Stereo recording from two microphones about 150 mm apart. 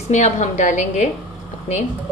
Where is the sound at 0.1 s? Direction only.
50° left (ahead or behind).